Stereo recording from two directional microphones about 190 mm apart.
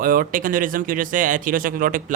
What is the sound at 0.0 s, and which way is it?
Speech, 45° right (ahead or behind).